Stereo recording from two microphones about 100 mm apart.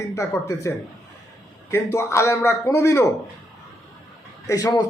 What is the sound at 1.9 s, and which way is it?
Speech, 30° left (ahead or behind).